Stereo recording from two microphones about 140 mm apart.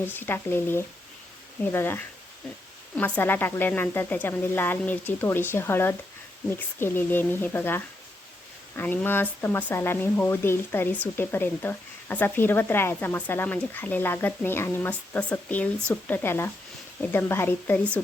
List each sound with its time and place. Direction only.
0.1 s speech: 15° left (ahead or behind)